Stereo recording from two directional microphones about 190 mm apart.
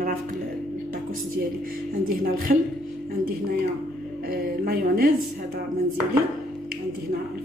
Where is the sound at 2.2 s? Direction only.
50° right (ahead or behind).